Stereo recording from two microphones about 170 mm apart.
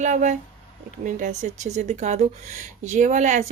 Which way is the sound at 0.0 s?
45° right (ahead or behind).